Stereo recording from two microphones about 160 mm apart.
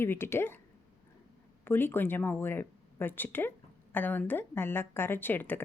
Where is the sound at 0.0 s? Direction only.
15° left (ahead or behind).